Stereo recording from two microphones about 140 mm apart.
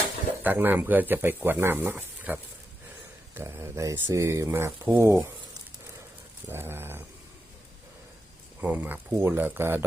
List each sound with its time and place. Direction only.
0.4 s speech: 15° right (ahead or behind)
6.5 s speech: 15° right (ahead or behind)
8.6 s speech: 10° right (ahead or behind)